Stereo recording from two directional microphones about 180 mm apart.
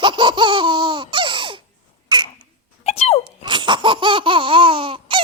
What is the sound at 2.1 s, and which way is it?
Babbling, 25° right (ahead or behind).